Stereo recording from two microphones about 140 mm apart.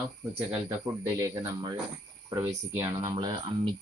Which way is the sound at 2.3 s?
20° right (ahead or behind).